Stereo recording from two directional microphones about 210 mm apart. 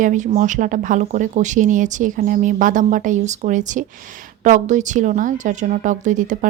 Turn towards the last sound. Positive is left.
turn(degrees=-40)  # may be behind; listen again after turning